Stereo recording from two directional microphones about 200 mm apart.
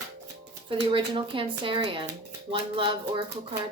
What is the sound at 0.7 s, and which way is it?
Speech, 25° right (ahead or behind).